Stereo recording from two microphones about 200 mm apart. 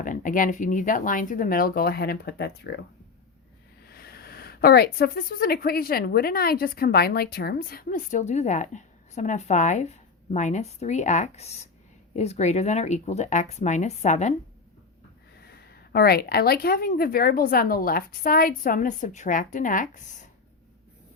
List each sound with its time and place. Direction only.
0.0 s speech: 40° left (ahead or behind)
3.8 s speech: 50° left (ahead or behind); by 14.3 s 35° left (ahead or behind)
15.4 s speech: 50° left (ahead or behind)